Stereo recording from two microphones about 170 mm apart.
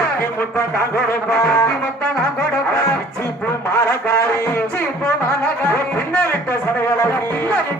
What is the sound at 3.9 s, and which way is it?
Music, 15° left (ahead or behind).